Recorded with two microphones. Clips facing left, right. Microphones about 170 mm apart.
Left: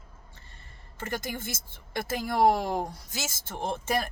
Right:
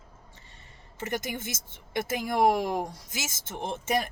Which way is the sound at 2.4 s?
25° left (ahead or behind).